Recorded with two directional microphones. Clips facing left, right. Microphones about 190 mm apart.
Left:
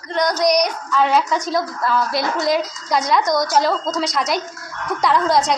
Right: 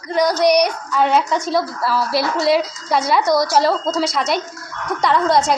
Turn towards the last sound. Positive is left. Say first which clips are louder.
# right 1 dB
turn(degrees=0)  # may be behind; listen again after turning